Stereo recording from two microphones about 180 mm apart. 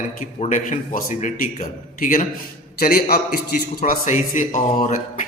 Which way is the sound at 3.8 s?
40° left (ahead or behind).